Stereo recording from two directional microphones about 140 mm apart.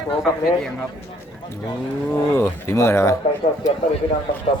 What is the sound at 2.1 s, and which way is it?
Speech, 15° left (ahead or behind).